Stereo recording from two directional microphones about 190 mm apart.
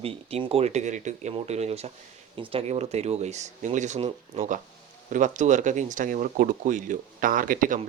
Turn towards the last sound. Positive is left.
turn(degrees=-45)  # may be behind; listen again after turning